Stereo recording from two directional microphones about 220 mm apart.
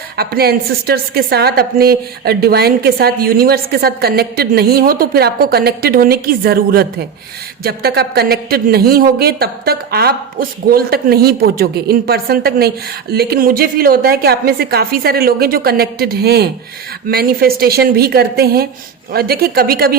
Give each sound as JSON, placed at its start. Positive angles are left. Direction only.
{"t": 0.2, "sound": "a woman's voice", "side_deg": -45}